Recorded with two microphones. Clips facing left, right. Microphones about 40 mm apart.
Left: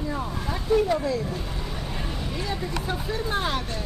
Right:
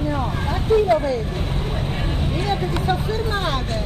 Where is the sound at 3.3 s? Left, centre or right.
Right.